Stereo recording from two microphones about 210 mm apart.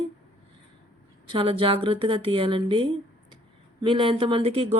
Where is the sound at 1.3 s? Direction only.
25° right (ahead or behind).